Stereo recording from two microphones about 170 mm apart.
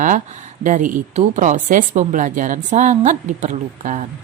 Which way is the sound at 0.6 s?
50° right (ahead or behind).